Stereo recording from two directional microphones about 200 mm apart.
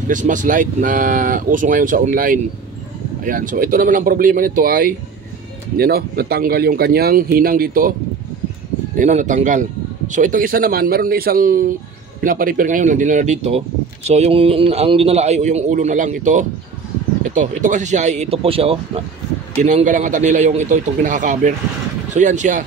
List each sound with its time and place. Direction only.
0.1 s a man's voice: 40° right (ahead or behind)
8.9 s a man's voice: 40° right (ahead or behind)
19.6 s a man's voice: 40° right (ahead or behind)